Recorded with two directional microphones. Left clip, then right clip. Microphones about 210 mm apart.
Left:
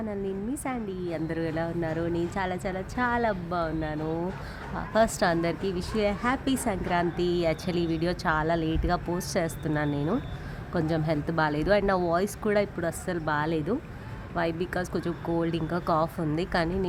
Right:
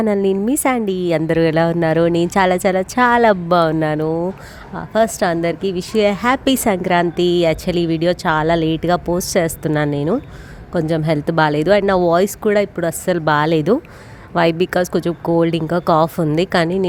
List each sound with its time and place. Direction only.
0.0 s a woman's voice: 50° right (ahead or behind)